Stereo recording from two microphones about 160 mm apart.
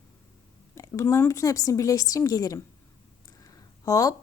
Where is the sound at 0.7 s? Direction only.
20° left (ahead or behind).